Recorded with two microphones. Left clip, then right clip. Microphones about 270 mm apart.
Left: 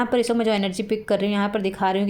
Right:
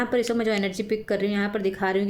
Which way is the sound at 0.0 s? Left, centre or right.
Centre.